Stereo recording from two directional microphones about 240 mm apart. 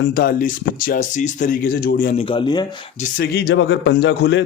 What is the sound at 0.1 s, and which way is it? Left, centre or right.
Speech, left.